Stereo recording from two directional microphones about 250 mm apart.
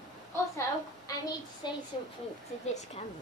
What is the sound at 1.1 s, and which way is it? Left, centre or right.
Child singing, centre.